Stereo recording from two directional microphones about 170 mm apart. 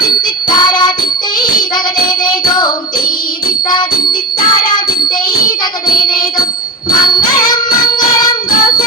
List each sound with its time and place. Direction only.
0.4 s music: 25° left (ahead or behind)
2.2 s music: 25° left (ahead or behind)
6.1 s music: 25° left (ahead or behind)